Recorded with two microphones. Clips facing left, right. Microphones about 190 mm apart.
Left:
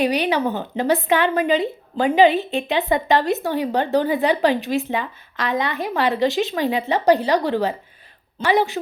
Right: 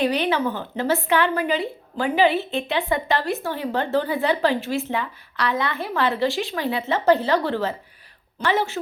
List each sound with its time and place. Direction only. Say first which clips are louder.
0.0 s a woman's voice: left 2 dB; 15° left (ahead or behind)